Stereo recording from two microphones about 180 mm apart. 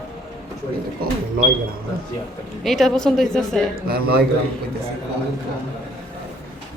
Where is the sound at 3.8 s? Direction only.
55° right (ahead or behind).